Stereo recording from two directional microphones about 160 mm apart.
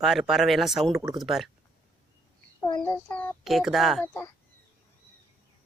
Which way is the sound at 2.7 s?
25° left (ahead or behind).